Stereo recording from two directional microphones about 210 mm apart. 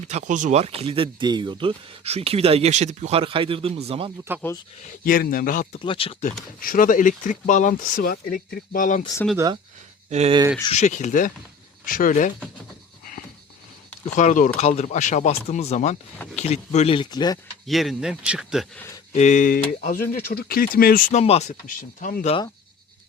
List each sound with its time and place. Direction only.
0.1 s speech: 35° right (ahead or behind)
4.9 s speech: 40° left (ahead or behind)
5.8 s speech: 25° left (ahead or behind)
6.6 s speech: 40° left (ahead or behind)
10.1 s speech: 30° right (ahead or behind)
10.6 s speech: 30° left (ahead or behind)
14.0 s speech: 35° left (ahead or behind); by 17.4 s 20° left (ahead or behind)
17.7 s speech: centre (ahead or behind)
19.1 s speech: 35° left (ahead or behind)